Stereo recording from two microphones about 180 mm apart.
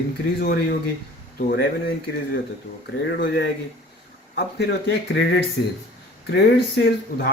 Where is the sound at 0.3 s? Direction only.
65° left (ahead or behind).